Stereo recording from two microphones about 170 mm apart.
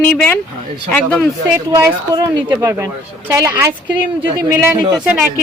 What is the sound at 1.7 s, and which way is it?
A woman's voice, 15° right (ahead or behind).